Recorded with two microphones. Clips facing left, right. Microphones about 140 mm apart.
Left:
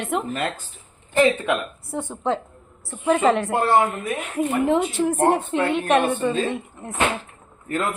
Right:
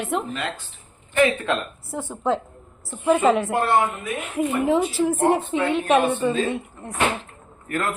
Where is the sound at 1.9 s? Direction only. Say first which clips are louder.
Right 1 dB; 5° right (ahead or behind).